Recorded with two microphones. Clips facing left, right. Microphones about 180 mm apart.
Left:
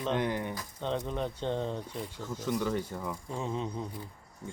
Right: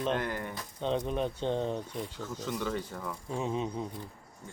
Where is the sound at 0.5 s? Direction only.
15° right (ahead or behind).